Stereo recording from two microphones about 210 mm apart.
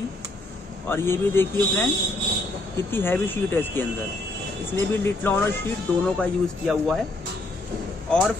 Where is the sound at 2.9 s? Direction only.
10° left (ahead or behind).